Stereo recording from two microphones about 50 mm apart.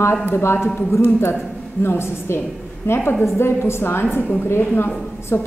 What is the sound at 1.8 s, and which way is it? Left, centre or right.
A woman's voice, left.